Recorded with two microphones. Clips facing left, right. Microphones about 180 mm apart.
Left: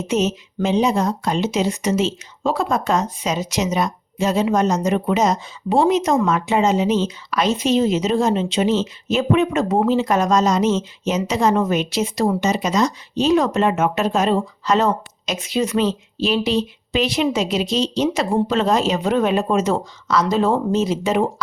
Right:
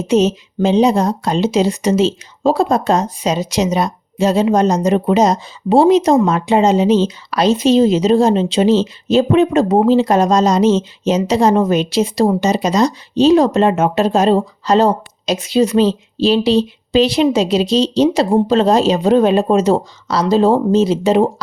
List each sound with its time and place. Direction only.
0.1 s speech: 30° right (ahead or behind)